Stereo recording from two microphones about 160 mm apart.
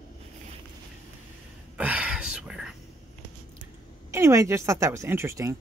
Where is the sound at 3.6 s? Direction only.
20° right (ahead or behind).